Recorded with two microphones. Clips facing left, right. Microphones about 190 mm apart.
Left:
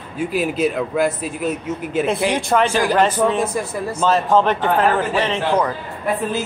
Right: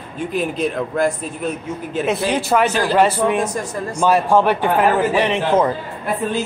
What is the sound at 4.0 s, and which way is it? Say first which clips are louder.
A man's voice: right 1 dB; 10° right (ahead or behind).